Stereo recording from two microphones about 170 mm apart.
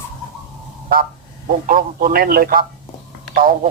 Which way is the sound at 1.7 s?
55° right (ahead or behind).